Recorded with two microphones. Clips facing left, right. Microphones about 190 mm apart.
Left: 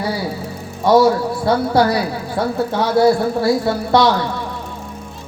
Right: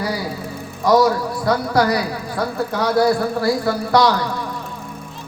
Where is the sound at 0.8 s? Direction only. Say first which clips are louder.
Left 3 dB; 25° left (ahead or behind).